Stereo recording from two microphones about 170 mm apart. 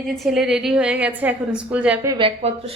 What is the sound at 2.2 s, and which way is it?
Speech, 35° right (ahead or behind).